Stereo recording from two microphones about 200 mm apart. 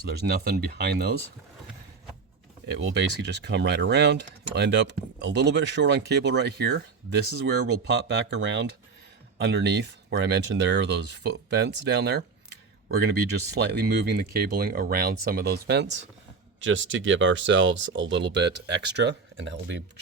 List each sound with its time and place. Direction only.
0.0 s speech: 50° right (ahead or behind)
2.7 s speech: 65° right (ahead or behind)
8.1 s speech: 65° right (ahead or behind)